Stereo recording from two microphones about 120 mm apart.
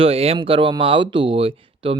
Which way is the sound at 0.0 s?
55° right (ahead or behind).